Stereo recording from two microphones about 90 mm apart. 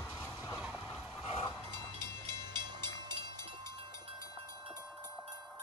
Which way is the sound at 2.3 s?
55° right (ahead or behind).